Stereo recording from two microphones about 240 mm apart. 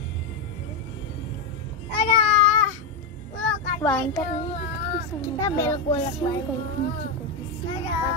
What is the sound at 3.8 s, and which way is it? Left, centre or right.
Speech, centre.